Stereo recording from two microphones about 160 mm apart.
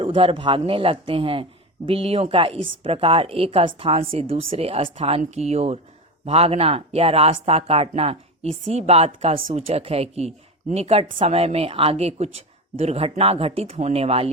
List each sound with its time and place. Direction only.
0.0 s speech: 35° right (ahead or behind)